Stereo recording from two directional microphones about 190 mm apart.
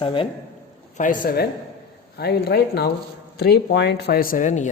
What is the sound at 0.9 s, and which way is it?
Speech, 45° left (ahead or behind).